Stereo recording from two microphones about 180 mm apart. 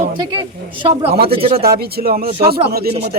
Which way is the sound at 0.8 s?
35° right (ahead or behind).